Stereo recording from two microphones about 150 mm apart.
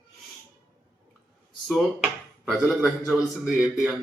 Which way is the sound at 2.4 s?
5° right (ahead or behind).